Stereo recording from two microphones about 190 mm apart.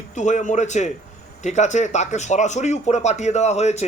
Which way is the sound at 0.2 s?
40° left (ahead or behind).